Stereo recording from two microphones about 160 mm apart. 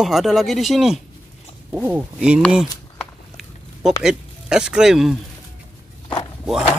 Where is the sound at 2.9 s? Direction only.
Centre (ahead or behind).